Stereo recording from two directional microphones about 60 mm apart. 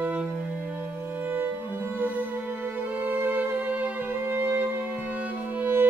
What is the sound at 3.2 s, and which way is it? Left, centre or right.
Music, right.